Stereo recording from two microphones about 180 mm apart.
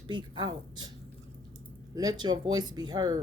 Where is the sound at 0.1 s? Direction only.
25° right (ahead or behind).